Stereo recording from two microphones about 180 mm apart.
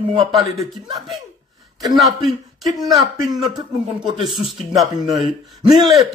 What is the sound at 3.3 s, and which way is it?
Speech, 25° right (ahead or behind).